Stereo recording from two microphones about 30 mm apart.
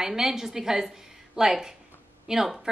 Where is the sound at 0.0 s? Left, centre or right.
Centre.